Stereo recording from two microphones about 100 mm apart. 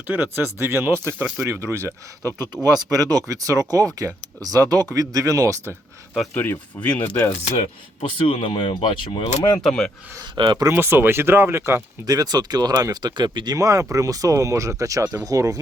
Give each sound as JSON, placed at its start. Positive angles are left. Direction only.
{"t": 0.1, "sound": "speech", "side_deg": -20}
{"t": 2.6, "sound": "speech", "side_deg": -40}
{"t": 6.3, "sound": "speech", "side_deg": 20}
{"t": 8.3, "sound": "speech", "side_deg": 60}
{"t": 9.6, "sound": "speech", "side_deg": 5}
{"t": 10.2, "sound": "speech", "side_deg": -50}
{"t": 10.7, "sound": "speech", "side_deg": -20}
{"t": 12.1, "sound": "speech", "side_deg": -40}